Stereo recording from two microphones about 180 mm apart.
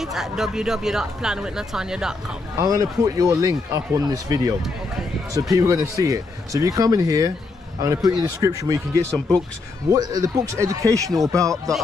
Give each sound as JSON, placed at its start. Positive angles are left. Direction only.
{"t": 0.0, "sound": "speech", "side_deg": 0}
{"t": 2.6, "sound": "speech", "side_deg": -20}